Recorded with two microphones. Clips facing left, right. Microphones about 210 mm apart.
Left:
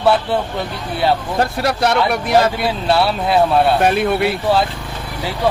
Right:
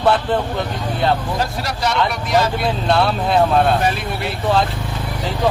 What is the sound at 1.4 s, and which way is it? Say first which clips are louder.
Speech: left 5 dB; 60° left (ahead or behind).